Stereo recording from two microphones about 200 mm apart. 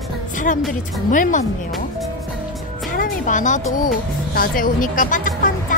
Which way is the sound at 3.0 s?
40° left (ahead or behind).